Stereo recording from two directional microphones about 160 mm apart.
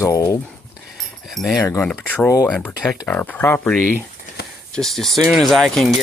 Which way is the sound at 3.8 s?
65° left (ahead or behind).